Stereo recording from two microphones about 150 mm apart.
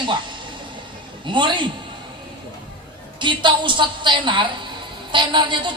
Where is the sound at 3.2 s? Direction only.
30° right (ahead or behind).